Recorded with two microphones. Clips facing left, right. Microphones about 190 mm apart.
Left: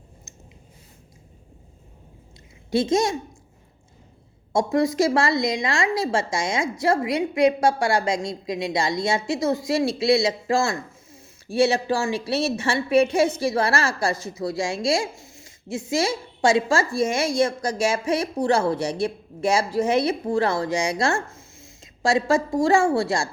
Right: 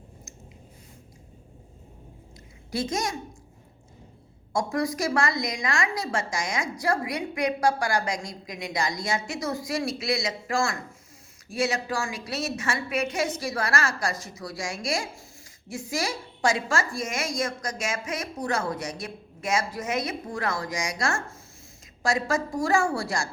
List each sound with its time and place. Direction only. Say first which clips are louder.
0.3 s a sound: right 1 dB; 25° left (ahead or behind)
2.6 s a woman's voice: left 8 dB; 25° left (ahead or behind)
4.5 s a woman's voice: left 7 dB; 25° left (ahead or behind)